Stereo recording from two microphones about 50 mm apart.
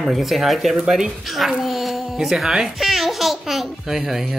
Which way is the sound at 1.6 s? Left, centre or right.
Centre.